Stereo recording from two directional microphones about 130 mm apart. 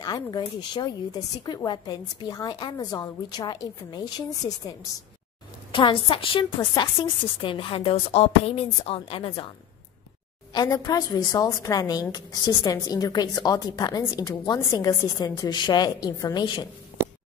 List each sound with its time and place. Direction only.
0.0 s a woman's voice: 30° left (ahead or behind)
5.7 s a woman's voice: 40° left (ahead or behind)
10.5 s a woman's voice: 30° left (ahead or behind)